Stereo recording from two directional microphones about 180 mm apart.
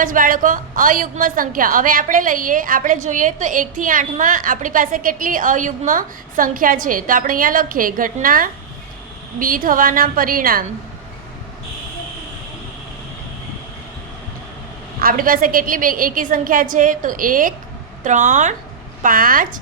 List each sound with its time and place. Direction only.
0.0 s a woman's voice: 50° right (ahead or behind)
15.0 s a woman's voice: 50° right (ahead or behind)